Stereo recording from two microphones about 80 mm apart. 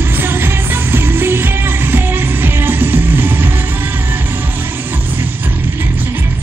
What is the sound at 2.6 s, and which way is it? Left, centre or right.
Music, right.